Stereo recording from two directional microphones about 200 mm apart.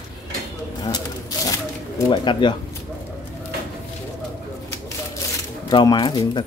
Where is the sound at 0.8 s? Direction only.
20° left (ahead or behind).